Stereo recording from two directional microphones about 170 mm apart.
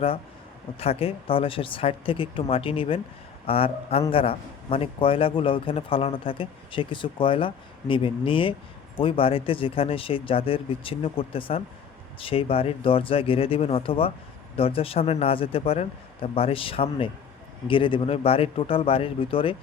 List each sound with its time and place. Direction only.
0.8 s a man's voice: 35° left (ahead or behind)